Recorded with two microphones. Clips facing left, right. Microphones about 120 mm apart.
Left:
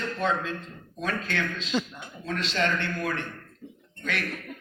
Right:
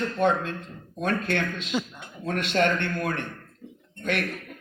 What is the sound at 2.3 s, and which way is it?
A man's voice, 55° right (ahead or behind).